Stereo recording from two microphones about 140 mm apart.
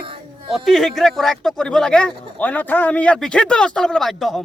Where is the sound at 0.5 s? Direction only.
Centre (ahead or behind).